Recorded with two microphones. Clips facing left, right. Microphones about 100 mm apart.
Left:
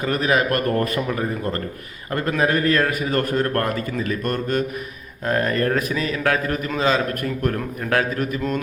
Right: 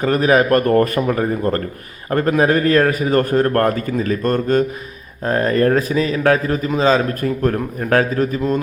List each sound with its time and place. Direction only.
0.0 s a man's voice: 35° right (ahead or behind)
0.7 s a man's voice: 45° right (ahead or behind); by 8.6 s 30° right (ahead or behind)